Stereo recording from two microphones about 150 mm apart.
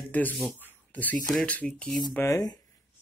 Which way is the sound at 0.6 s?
10° left (ahead or behind).